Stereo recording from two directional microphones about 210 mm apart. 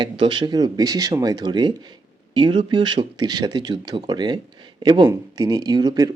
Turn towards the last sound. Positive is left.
turn(degrees=-15)  # may be behind; listen again after turning